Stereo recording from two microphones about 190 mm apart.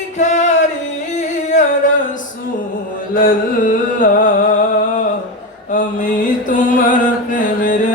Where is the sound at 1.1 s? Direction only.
40° left (ahead or behind).